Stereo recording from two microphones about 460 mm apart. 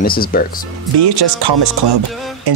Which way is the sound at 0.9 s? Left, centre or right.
Right.